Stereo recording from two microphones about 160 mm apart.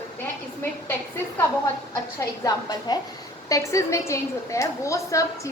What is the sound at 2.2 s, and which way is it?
A woman's voice, 25° left (ahead or behind).